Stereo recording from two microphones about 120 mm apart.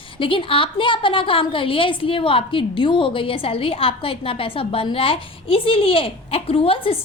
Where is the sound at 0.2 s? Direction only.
45° left (ahead or behind).